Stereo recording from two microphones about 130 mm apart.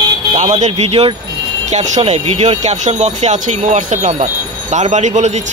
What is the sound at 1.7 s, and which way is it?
Speech, 60° right (ahead or behind).